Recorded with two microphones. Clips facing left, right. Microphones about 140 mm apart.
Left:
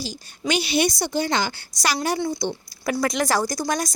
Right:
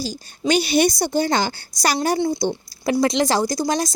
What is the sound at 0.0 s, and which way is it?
A woman's voice, 40° right (ahead or behind).